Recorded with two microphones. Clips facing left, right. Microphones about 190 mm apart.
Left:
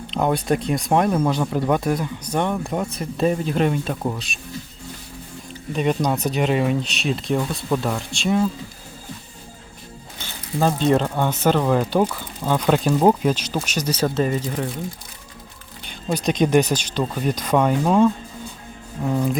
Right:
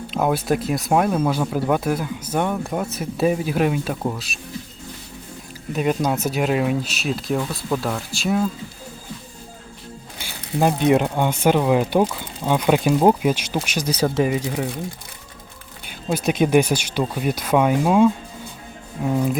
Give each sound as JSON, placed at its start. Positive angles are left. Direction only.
{"t": 0.1, "sound": "speech", "side_deg": -5}
{"t": 5.7, "sound": "speech", "side_deg": -5}
{"t": 10.2, "sound": "speech", "side_deg": -10}
{"t": 15.9, "sound": "speech", "side_deg": -5}